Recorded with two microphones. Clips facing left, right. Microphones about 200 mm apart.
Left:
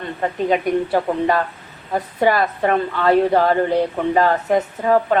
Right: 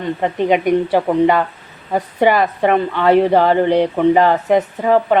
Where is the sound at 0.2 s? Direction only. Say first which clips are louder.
Right 2 dB; 15° right (ahead or behind).